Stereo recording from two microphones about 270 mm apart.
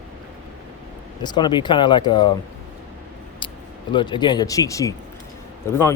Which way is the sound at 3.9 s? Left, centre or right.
Centre.